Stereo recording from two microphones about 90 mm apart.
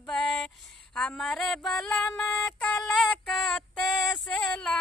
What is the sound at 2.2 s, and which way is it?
Synthetic singing, 15° left (ahead or behind).